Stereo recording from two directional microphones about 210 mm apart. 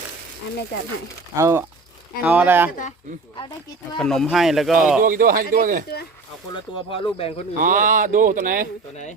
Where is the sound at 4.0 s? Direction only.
Centre (ahead or behind).